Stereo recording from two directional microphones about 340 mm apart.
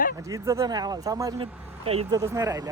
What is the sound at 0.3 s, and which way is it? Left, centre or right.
Speech, centre.